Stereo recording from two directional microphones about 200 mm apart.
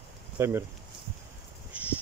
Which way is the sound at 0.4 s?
15° right (ahead or behind).